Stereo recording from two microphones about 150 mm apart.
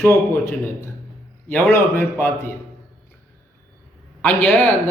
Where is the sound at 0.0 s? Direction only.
15° left (ahead or behind).